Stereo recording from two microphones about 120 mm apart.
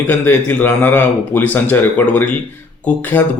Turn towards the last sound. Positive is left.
turn(degrees=15)  # may be behind; listen again after turning